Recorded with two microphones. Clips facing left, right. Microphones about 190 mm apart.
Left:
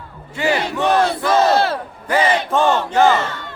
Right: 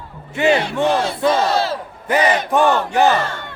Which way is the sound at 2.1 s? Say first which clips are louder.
Right 1 dB; 15° right (ahead or behind).